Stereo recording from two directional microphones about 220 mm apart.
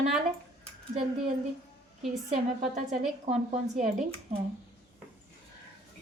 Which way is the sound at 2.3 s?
30° right (ahead or behind).